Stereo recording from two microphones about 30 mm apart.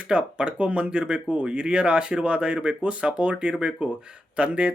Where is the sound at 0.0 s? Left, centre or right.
Right.